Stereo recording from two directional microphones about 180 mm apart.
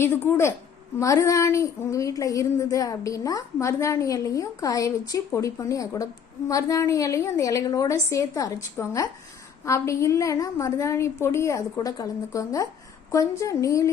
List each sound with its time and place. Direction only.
0.3 s speech: 15° left (ahead or behind)